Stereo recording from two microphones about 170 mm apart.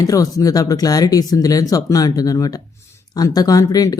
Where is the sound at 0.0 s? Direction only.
20° left (ahead or behind).